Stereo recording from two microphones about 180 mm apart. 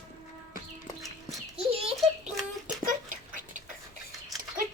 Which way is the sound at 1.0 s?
Centre (ahead or behind).